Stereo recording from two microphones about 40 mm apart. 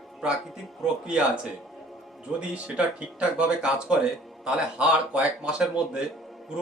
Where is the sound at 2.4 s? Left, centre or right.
Right.